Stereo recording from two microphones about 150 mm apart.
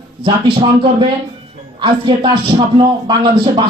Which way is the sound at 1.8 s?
30° right (ahead or behind).